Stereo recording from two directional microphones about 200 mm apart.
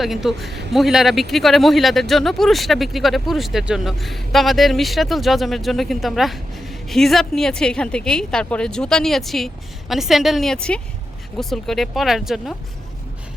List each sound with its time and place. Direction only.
0.0 s a man's voice: centre (ahead or behind)